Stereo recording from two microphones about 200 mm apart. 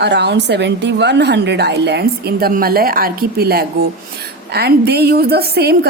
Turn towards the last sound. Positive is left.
turn(degrees=-50)  # may be behind; listen again after turning